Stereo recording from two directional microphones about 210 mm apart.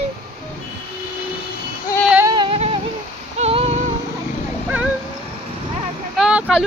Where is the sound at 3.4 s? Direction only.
30° right (ahead or behind).